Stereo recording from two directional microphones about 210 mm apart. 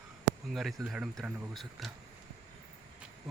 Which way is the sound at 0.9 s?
5° right (ahead or behind).